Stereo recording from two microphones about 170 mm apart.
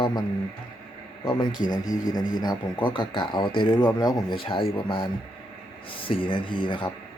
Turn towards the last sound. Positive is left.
turn(degrees=30)  # may be behind; listen again after turning